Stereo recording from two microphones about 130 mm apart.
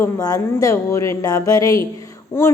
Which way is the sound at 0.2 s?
25° left (ahead or behind).